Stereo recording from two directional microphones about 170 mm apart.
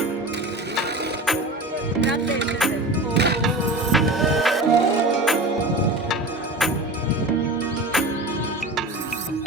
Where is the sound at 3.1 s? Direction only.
80° right.